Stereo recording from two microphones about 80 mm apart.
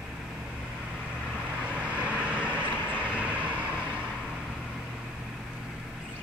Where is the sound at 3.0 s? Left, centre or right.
Centre.